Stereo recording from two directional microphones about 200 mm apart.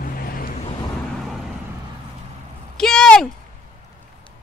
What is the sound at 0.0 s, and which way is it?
Vehicle, 45° left (ahead or behind).